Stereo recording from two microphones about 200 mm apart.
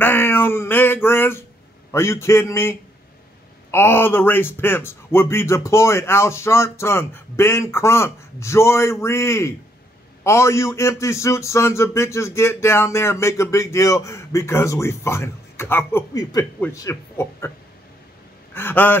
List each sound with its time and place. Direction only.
0.0 s a sound: 10° left (ahead or behind)
1.9 s a man's voice: 15° left (ahead or behind)
18.5 s a man's voice: 10° left (ahead or behind)